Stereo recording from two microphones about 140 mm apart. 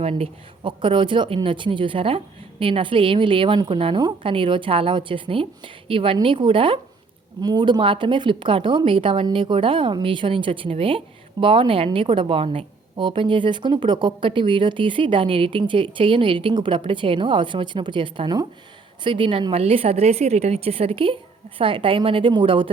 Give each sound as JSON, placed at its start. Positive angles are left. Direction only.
{"t": 0.0, "sound": "a woman's voice", "side_deg": -45}